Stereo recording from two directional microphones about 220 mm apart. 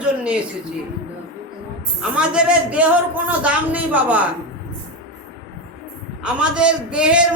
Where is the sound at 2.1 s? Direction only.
5° right (ahead or behind).